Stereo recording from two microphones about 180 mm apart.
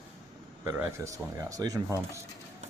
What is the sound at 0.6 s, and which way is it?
Speech, 15° right (ahead or behind).